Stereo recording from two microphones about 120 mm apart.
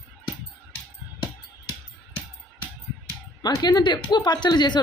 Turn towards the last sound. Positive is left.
turn(degrees=40)  # may be behind; listen again after turning